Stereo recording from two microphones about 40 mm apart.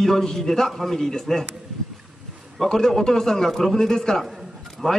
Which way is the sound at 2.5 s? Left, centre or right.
Centre.